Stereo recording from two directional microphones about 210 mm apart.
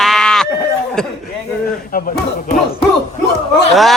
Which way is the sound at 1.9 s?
40° left (ahead or behind).